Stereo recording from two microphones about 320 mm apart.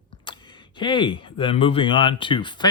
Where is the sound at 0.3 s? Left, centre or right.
Centre.